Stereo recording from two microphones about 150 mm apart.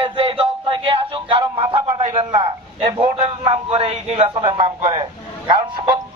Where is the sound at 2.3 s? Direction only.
45° right (ahead or behind).